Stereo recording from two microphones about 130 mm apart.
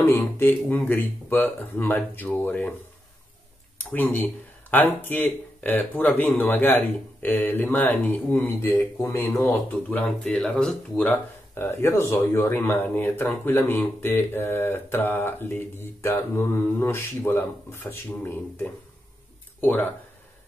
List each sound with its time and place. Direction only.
0.1 s speech: 15° left (ahead or behind)
3.9 s speech: 15° left (ahead or behind)